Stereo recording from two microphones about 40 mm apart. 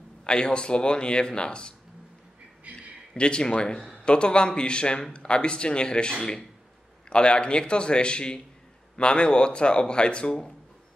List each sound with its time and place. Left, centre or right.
0.2 s speech: left
3.2 s speech: left